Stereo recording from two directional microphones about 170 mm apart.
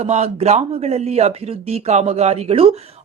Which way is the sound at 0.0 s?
40° right (ahead or behind).